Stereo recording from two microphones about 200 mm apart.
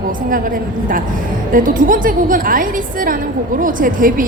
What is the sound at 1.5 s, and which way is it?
A woman's voice, 45° right (ahead or behind).